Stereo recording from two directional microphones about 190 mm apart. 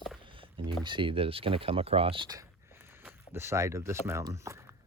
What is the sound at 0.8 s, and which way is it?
Speech, 25° right (ahead or behind).